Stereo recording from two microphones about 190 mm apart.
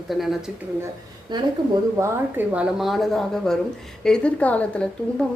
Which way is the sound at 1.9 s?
10° right (ahead or behind).